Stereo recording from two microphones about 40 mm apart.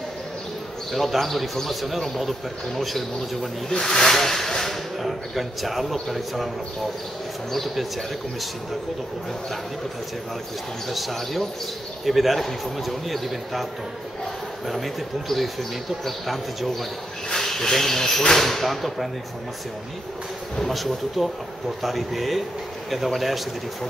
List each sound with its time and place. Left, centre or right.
0.9 s a man's voice: centre
5.0 s a man's voice: centre
7.5 s a man's voice: centre
10.9 s a man's voice: centre
14.7 s a man's voice: centre
20.5 s a man's voice: centre